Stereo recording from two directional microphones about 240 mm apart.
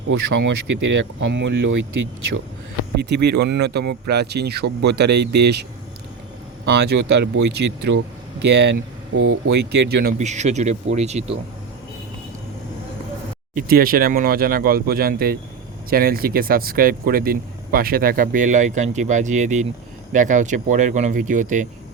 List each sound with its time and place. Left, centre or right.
0.1 s speech: right
3.0 s speech: right
6.7 s speech: right
13.5 s speech: right